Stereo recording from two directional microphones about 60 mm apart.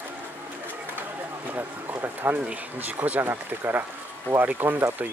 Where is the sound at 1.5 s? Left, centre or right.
Right.